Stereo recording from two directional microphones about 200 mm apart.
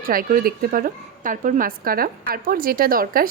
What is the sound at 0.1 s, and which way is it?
A woman's voice, 45° right (ahead or behind).